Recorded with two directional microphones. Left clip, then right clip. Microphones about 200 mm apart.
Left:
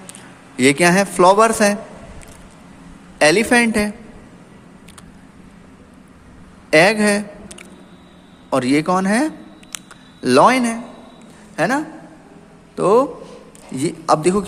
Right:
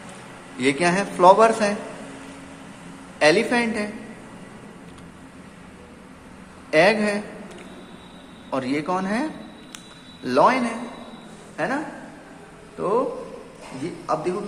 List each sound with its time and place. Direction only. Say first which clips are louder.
0.5 s a man's voice: left 7 dB; 45° left (ahead or behind)
3.2 s a man's voice: left 5 dB; 45° left (ahead or behind)
6.7 s a man's voice: left 5 dB; 45° left (ahead or behind)
14.1 s a man's voice: left 9 dB; 55° left (ahead or behind)